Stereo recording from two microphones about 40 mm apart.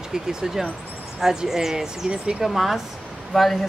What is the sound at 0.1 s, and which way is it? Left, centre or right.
Speech, centre.